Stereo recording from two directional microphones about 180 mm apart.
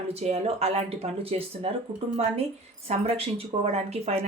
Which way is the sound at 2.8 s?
35° right (ahead or behind).